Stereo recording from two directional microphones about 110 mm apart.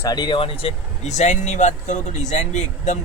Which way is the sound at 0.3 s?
60° left (ahead or behind).